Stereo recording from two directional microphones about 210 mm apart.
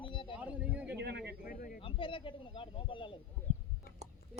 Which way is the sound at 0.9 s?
50° right (ahead or behind).